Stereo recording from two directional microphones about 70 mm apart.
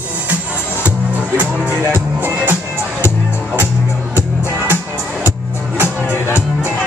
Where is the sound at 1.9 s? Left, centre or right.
Right.